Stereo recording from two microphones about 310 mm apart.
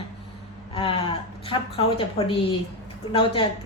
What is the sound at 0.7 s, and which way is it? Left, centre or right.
A woman's voice, centre.